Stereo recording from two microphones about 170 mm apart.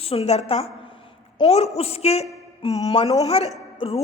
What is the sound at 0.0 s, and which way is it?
Speech, 35° left (ahead or behind).